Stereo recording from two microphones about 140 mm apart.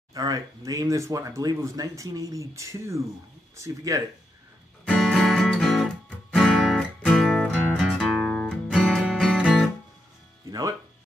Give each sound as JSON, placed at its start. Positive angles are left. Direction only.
{"t": 0.1, "sound": "speech", "side_deg": -25}
{"t": 4.9, "sound": "music", "side_deg": 0}